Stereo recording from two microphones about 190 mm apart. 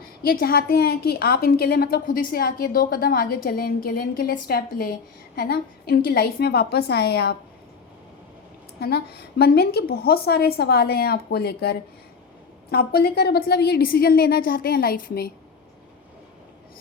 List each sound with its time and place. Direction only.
0.2 s a woman's voice: 50° left (ahead or behind)
8.8 s a woman's voice: 55° left (ahead or behind)